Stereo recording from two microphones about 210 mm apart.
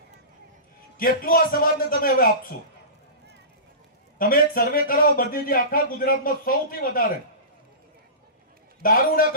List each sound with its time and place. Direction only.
0.9 s speech: 40° left (ahead or behind)
4.2 s speech: 40° left (ahead or behind)
8.8 s speech: 45° left (ahead or behind)